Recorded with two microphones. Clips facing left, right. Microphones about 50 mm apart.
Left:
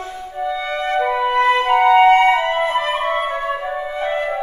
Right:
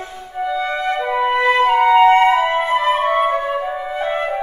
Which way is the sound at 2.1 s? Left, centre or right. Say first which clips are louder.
Right 1 dB; centre.